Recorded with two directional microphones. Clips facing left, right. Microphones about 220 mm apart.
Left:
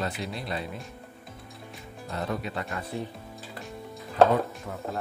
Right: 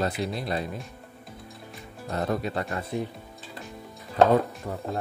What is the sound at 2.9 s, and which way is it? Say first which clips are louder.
Speech: right 4 dB; 15° right (ahead or behind).